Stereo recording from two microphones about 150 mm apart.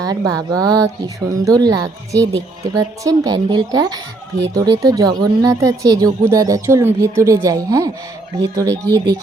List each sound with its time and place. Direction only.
0.0 s speech: 25° right (ahead or behind)